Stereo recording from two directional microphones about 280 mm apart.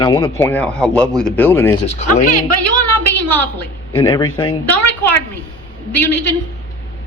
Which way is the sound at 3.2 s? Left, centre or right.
Centre.